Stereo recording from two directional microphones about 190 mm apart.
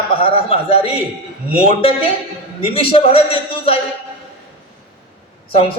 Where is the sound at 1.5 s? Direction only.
30° left (ahead or behind).